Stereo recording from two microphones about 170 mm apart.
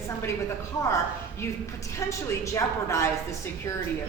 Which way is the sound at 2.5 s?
15° left (ahead or behind).